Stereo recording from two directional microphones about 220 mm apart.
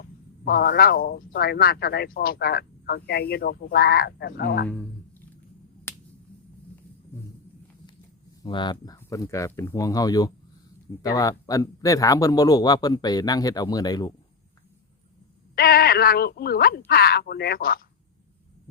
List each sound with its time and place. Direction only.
0.0 s speech: 45° left (ahead or behind)
5.9 s finger snapping: 10° left (ahead or behind)
8.4 s speech: 20° left (ahead or behind)
15.5 s speech: 45° left (ahead or behind)